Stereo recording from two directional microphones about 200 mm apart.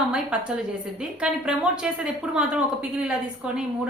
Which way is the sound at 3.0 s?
5° right (ahead or behind).